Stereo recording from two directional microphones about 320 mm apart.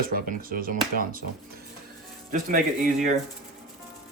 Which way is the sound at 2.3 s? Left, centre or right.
Right.